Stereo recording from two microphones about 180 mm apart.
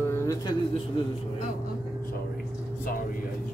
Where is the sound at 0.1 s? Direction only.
15° left (ahead or behind).